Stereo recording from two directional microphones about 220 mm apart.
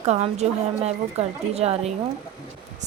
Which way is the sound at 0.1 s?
30° right (ahead or behind).